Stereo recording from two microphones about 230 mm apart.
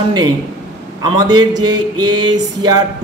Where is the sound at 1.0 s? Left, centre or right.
Centre.